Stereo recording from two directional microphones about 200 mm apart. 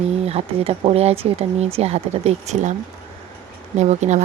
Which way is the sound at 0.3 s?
30° right (ahead or behind).